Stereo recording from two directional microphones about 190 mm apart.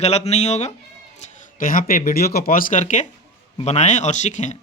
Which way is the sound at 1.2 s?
45° left (ahead or behind).